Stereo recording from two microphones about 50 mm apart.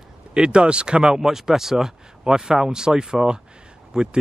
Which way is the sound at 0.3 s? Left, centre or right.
Centre.